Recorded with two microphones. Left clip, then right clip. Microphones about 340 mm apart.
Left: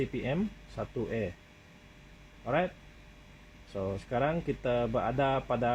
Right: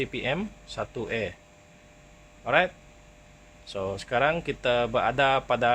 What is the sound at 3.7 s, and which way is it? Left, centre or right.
Speech, right.